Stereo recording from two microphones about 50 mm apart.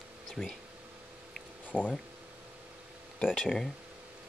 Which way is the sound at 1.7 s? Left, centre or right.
Left.